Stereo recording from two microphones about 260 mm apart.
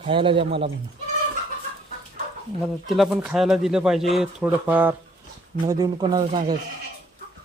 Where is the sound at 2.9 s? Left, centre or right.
Centre.